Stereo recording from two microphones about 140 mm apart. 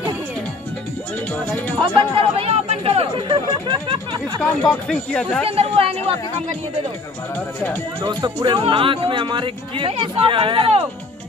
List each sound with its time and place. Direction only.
1.8 s speech: 40° right (ahead or behind)
4.6 s speech: 10° left (ahead or behind)
5.6 s a woman's voice: 45° right (ahead or behind)
8.0 s speech: 30° right (ahead or behind)